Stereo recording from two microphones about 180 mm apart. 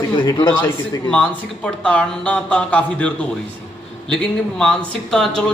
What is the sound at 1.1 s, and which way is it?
Speech, 5° left (ahead or behind).